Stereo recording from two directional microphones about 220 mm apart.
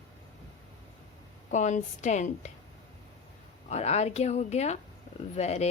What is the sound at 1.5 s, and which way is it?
A woman's voice, 35° left (ahead or behind).